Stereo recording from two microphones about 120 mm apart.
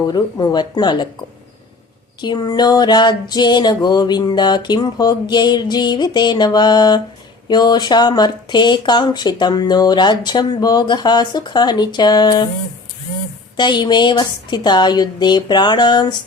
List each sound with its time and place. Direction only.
0.1 s speech: 35° left (ahead or behind)
2.2 s speech: 35° left (ahead or behind)
13.6 s speech: 40° left (ahead or behind)